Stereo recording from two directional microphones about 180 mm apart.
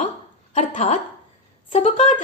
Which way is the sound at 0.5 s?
40° left (ahead or behind).